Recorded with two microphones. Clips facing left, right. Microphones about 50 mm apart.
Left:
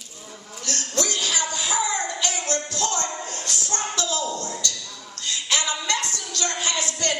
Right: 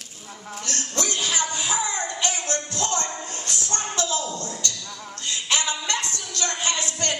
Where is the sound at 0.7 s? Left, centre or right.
Right.